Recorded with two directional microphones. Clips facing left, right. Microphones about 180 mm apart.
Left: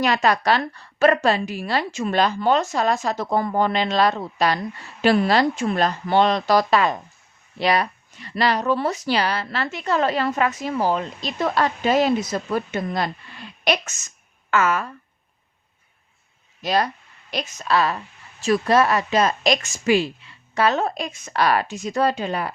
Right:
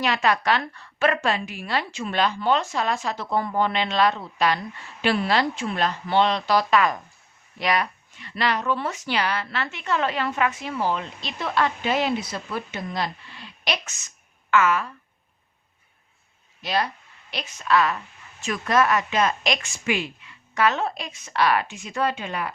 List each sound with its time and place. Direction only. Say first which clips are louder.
0.0 s speech: left 3 dB; 40° left (ahead or behind)
16.6 s speech: left 4 dB; 45° left (ahead or behind)